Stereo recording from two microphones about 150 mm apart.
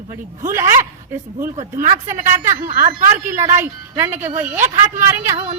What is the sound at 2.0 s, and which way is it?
A woman's voice, 20° right (ahead or behind).